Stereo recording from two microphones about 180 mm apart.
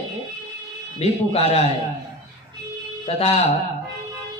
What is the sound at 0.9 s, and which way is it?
Speech, 35° left (ahead or behind).